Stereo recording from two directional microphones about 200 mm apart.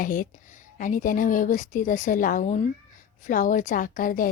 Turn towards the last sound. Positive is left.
turn(degrees=45)  # may be behind; listen again after turning